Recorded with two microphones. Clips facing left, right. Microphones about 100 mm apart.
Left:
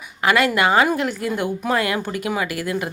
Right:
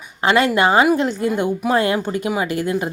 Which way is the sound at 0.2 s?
25° right (ahead or behind).